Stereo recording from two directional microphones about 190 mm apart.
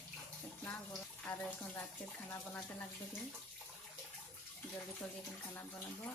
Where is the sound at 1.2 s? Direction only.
10° left (ahead or behind).